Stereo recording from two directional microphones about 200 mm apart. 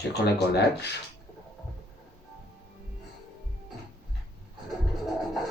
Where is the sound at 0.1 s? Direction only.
55° left (ahead or behind).